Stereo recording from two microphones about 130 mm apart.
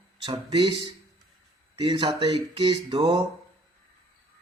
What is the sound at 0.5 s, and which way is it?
Speech, 45° right (ahead or behind).